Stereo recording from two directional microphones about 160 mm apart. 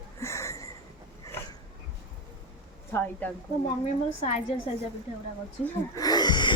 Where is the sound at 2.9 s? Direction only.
10° left (ahead or behind).